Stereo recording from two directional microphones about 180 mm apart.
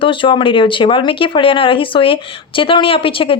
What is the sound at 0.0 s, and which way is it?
Speech, 30° left (ahead or behind).